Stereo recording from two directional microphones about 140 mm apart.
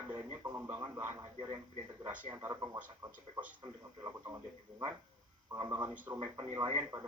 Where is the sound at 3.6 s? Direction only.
25° right (ahead or behind).